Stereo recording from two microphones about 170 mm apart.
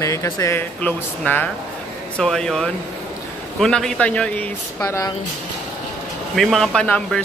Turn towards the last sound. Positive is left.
turn(degrees=5)  # may be behind; listen again after turning